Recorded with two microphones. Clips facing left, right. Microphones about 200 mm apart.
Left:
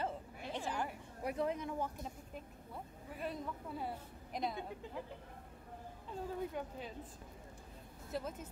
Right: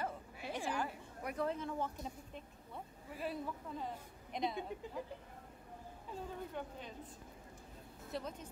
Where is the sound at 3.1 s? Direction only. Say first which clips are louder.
Right 1 dB; 5° right (ahead or behind).